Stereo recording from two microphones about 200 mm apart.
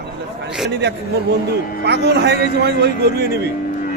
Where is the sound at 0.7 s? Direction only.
60° right (ahead or behind).